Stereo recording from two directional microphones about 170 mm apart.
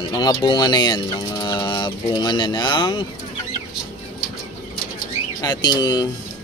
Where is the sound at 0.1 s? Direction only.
25° left (ahead or behind).